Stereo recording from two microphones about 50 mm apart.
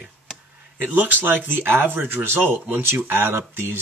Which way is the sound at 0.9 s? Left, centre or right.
Right.